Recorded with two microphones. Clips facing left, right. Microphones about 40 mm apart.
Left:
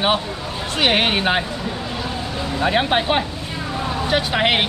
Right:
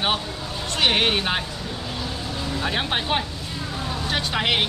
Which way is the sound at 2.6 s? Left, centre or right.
Centre.